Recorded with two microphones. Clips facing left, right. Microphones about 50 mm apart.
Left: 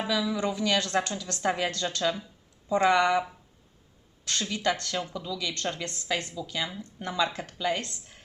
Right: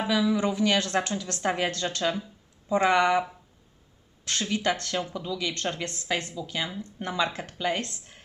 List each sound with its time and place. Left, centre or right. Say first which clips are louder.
0.1 s speech: right 4 dB; right
4.3 s speech: right 1 dB; right